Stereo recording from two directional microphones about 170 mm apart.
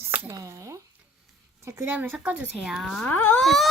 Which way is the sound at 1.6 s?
15° right (ahead or behind).